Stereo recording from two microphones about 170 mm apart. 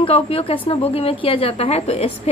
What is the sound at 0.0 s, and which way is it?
A woman's voice, 35° left (ahead or behind).